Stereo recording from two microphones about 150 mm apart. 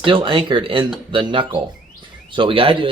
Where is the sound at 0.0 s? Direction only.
35° right (ahead or behind).